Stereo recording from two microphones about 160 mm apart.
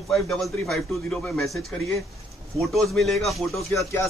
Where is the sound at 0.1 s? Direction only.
Centre (ahead or behind).